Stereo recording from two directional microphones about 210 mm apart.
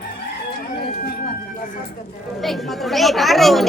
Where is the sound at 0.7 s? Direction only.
45° left (ahead or behind).